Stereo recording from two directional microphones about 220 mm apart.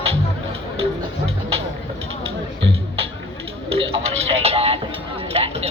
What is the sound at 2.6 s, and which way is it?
Music, 25° right (ahead or behind).